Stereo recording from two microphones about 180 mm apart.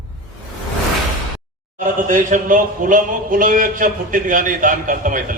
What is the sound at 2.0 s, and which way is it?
Speech, 45° right (ahead or behind).